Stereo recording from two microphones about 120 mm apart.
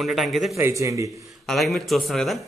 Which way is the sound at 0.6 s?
25° right (ahead or behind).